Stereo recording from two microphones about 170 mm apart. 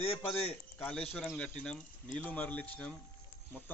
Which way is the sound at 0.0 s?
35° left (ahead or behind).